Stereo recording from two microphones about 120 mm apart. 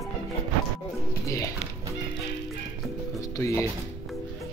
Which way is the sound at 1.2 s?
25° left (ahead or behind).